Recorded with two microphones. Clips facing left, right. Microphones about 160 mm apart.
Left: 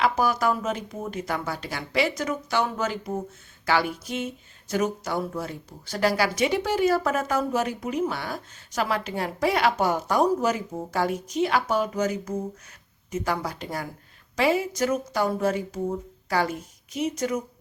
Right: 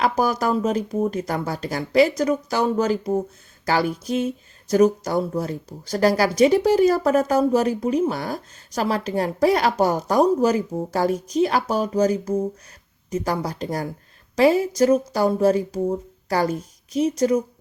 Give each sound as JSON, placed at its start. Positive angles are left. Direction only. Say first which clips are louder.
{"t": 0.0, "sound": "speech", "louder": "right 2 dB", "side_deg": -40}